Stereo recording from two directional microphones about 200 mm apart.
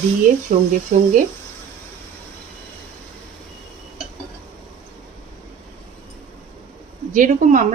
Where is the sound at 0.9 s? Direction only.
40° right (ahead or behind).